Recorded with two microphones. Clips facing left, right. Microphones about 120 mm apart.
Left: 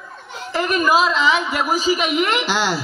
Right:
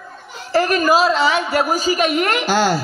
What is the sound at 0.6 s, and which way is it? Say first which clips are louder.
A man's voice: even; 40° right (ahead or behind).